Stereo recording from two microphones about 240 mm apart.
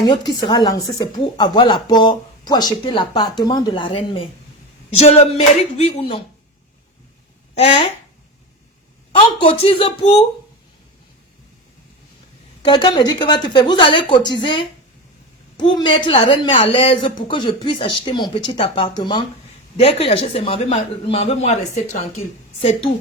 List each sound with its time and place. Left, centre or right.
0.0 s a woman's voice: centre
7.5 s speech: left
9.4 s a woman's voice: left
12.6 s a woman's voice: centre